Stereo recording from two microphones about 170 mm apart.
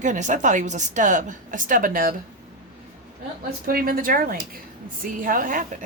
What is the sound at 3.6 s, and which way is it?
Speech, 60° right (ahead or behind).